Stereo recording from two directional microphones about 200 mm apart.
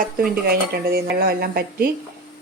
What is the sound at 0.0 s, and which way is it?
Speech, 50° right (ahead or behind).